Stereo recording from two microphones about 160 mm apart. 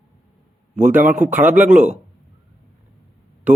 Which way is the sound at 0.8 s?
55° right (ahead or behind).